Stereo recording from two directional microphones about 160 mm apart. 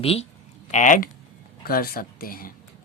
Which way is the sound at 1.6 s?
65° left (ahead or behind).